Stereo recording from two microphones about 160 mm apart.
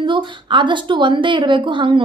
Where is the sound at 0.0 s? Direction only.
30° right (ahead or behind).